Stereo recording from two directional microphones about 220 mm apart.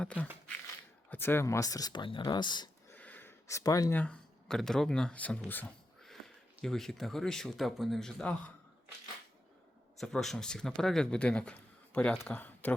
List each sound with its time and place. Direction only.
0.0 s speech: 5° left (ahead or behind)
2.9 s speech: 10° left (ahead or behind)
10.0 s speech: centre (ahead or behind)